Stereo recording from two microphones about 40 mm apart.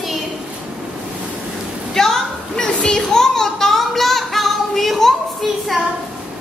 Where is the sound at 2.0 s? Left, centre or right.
Centre.